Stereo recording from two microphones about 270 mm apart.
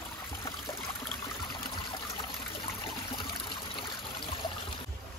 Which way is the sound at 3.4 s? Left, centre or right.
Centre.